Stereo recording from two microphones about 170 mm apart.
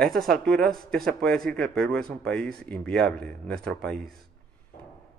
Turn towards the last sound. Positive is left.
turn(degrees=0)  # may be behind; listen again after turning